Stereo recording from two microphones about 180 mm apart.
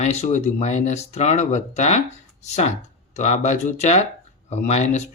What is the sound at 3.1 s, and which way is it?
Speech, 40° left (ahead or behind).